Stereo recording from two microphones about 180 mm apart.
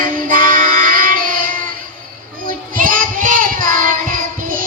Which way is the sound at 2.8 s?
50° right (ahead or behind).